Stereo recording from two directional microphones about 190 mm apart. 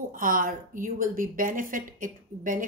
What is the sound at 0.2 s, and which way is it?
A woman's voice, 45° right (ahead or behind).